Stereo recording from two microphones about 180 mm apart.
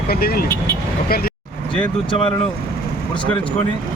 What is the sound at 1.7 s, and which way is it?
Speech, 30° left (ahead or behind).